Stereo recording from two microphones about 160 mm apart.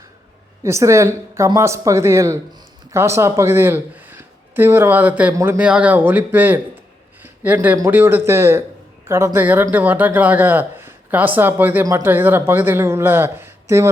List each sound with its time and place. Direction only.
0.6 s speech: 20° right (ahead or behind)
7.2 s a sound: 10° right (ahead or behind)
7.8 s speech: 15° right (ahead or behind)